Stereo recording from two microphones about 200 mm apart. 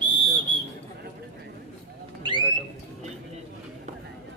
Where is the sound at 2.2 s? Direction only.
25° right (ahead or behind).